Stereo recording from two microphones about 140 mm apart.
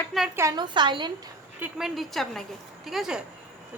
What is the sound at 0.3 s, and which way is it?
Speech, 25° right (ahead or behind).